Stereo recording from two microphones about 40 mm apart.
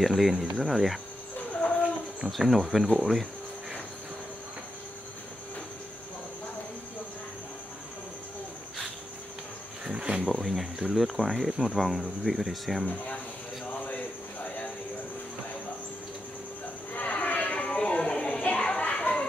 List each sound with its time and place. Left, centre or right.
0.0 s speech: centre
2.3 s speech: centre
9.9 s speech: centre
10.3 s speech: centre
16.9 s a sound: left
18.4 s children playing: left